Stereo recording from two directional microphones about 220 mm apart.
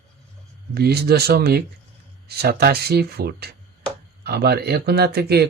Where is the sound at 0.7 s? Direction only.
45° right (ahead or behind).